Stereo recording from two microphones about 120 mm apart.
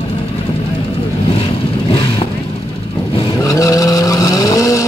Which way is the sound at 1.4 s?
50° left (ahead or behind).